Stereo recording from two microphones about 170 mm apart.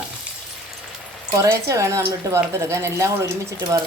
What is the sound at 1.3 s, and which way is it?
Speech, 20° right (ahead or behind).